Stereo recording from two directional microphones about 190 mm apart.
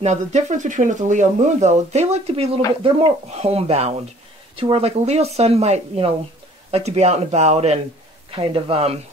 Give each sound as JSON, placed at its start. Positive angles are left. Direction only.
{"t": 0.0, "sound": "speech", "side_deg": -35}